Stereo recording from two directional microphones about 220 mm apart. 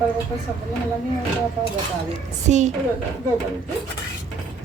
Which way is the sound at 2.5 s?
30° right (ahead or behind).